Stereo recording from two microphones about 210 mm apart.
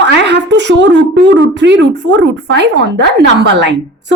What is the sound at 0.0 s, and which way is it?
A woman's voice, 55° right (ahead or behind).